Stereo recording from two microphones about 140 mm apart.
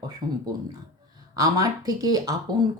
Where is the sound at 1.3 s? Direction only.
25° right (ahead or behind).